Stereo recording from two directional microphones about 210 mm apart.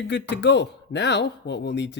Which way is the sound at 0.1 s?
55° left (ahead or behind).